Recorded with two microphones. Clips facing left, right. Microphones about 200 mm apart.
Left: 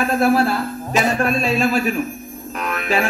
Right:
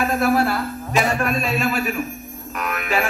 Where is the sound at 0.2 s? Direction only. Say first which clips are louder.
Left 4 dB; 30° left (ahead or behind).